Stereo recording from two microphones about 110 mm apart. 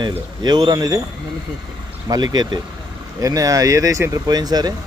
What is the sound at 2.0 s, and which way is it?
Speech, 35° right (ahead or behind).